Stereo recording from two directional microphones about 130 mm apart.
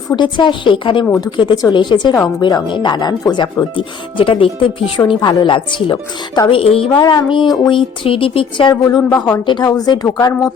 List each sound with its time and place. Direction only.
0.1 s speech: 35° left (ahead or behind)
6.6 s a woman's voice: 45° left (ahead or behind); by 10.5 s 30° left (ahead or behind)